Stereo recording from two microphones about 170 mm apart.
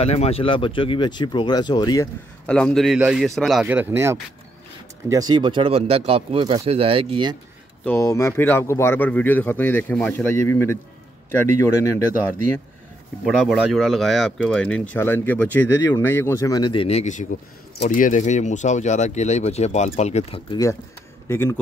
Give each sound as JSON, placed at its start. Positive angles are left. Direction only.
{"t": 0.0, "sound": "speech", "side_deg": 35}
{"t": 2.4, "sound": "a man's voice", "side_deg": 5}
{"t": 7.8, "sound": "speech", "side_deg": 15}
{"t": 13.2, "sound": "speech", "side_deg": 0}
{"t": 21.3, "sound": "speech", "side_deg": 15}